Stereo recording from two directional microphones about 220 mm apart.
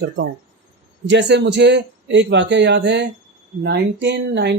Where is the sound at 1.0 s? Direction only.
50° right (ahead or behind).